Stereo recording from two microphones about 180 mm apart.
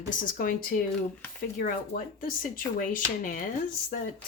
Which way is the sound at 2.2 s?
50° left (ahead or behind).